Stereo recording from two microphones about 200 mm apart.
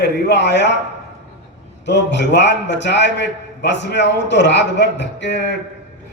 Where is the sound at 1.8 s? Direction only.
60° left (ahead or behind).